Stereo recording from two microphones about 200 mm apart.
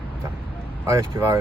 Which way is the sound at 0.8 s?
15° right (ahead or behind).